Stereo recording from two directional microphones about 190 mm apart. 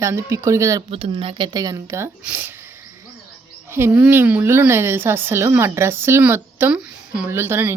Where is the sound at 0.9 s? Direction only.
30° right (ahead or behind); by 2.5 s 10° right (ahead or behind).